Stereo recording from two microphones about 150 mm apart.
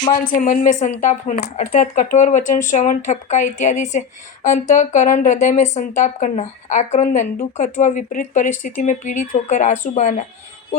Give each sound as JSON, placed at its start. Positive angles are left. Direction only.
{"t": 0.1, "sound": "speech", "side_deg": 60}